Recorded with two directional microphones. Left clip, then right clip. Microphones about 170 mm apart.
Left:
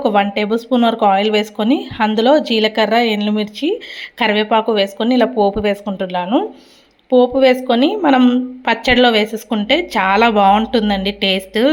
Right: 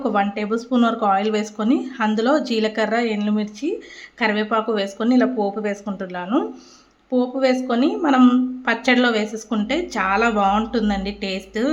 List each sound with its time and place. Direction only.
0.0 s speech: 20° left (ahead or behind)